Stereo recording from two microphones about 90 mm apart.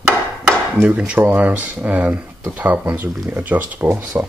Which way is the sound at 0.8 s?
15° right (ahead or behind).